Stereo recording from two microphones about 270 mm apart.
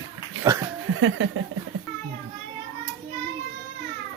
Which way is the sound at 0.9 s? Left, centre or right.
Right.